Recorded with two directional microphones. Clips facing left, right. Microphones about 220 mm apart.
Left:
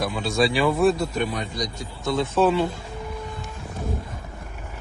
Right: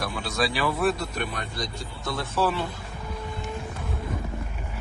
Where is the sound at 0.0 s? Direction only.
25° left (ahead or behind).